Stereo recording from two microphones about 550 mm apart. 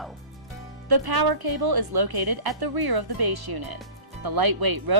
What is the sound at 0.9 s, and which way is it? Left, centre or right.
Speech, right.